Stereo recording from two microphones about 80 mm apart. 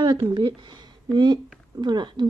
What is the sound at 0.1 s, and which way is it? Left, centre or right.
Speech, right.